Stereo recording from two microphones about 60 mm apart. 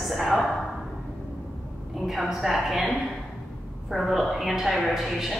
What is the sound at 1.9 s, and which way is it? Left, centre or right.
A woman's voice, centre.